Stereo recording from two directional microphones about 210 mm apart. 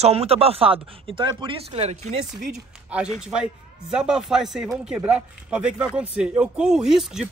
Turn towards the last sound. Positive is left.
turn(degrees=0)  # may be behind; listen again after turning